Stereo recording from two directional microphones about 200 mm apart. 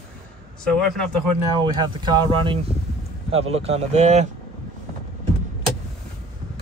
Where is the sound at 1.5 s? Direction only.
20° right (ahead or behind).